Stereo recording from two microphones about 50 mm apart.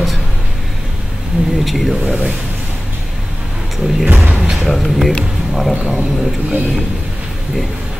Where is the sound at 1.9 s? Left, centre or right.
Centre.